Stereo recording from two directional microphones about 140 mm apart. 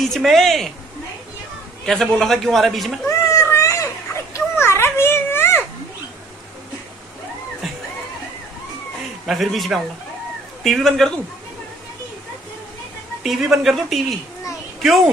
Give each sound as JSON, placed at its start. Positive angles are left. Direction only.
{"t": 0.0, "sound": "a man's voice", "side_deg": 0}
{"t": 1.9, "sound": "a man's voice", "side_deg": 5}
{"t": 3.1, "sound": "cat", "side_deg": 20}
{"t": 9.2, "sound": "a man's voice", "side_deg": 0}
{"t": 13.2, "sound": "a man's voice", "side_deg": 0}